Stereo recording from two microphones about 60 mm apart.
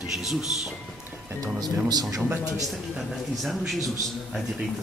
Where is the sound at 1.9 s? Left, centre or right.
Right.